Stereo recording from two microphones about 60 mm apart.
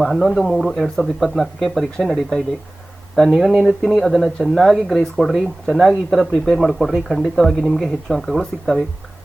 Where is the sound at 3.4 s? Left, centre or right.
Centre.